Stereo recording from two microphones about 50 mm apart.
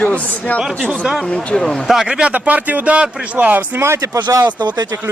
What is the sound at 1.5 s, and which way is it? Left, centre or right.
Speech, centre.